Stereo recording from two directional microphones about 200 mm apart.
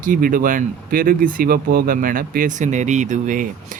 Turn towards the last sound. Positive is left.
turn(degrees=-40)  # may be behind; listen again after turning